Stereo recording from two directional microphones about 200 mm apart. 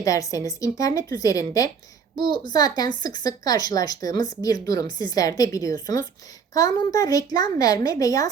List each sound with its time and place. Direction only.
0.0 s a woman's voice: 15° left (ahead or behind)